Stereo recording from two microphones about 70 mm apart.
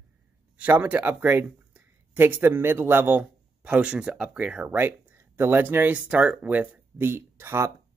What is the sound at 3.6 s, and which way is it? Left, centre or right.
Speech, centre.